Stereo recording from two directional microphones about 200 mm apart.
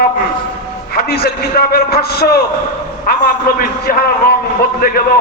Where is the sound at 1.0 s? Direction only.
50° left (ahead or behind).